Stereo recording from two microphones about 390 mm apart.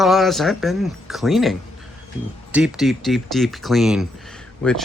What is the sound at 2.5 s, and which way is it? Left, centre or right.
Speech, centre.